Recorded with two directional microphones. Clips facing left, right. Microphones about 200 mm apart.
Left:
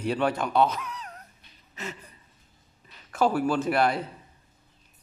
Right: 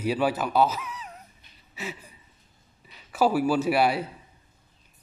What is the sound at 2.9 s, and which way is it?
A man's voice, 5° right (ahead or behind).